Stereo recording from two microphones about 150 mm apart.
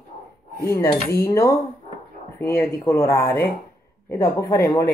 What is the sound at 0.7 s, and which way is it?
Speech, 20° left (ahead or behind).